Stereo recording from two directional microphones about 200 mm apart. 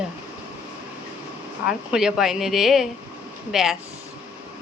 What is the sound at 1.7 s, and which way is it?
Speech, 5° right (ahead or behind).